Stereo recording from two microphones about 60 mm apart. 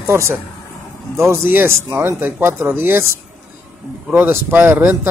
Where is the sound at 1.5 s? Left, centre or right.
Right.